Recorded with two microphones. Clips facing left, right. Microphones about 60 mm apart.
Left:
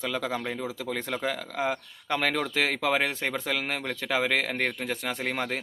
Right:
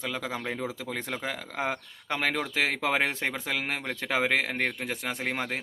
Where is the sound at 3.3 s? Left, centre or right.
Centre.